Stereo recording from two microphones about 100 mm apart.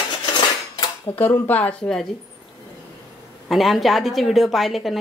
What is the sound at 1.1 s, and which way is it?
Speech, 20° left (ahead or behind).